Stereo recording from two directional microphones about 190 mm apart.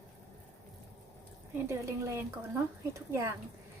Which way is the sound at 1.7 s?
15° right (ahead or behind).